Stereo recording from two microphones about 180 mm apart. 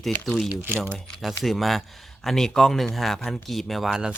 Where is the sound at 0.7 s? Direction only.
10° right (ahead or behind).